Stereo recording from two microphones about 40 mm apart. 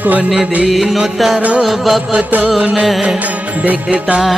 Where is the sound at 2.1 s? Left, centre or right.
Right.